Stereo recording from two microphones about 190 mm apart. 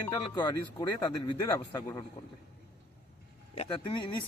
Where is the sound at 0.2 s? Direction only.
25° left (ahead or behind).